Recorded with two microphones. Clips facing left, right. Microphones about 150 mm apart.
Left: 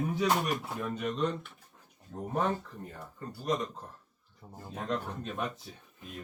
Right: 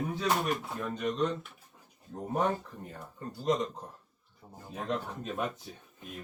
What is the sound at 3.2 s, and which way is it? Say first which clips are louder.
Speech: right 3 dB; 20° right (ahead or behind).